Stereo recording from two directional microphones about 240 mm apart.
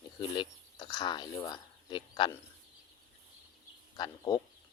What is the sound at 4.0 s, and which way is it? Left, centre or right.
Speech, centre.